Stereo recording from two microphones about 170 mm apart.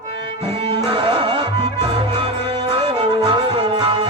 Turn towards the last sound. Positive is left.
turn(degrees=-25)  # may be behind; listen again after turning